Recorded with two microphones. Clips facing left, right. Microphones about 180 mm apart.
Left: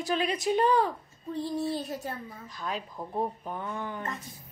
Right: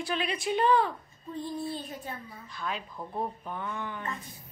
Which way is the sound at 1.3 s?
85° left.